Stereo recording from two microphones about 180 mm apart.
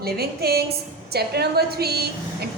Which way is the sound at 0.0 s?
60° right (ahead or behind).